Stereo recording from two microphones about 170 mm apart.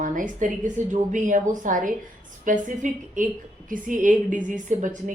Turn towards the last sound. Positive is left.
turn(degrees=-50)  # may be behind; listen again after turning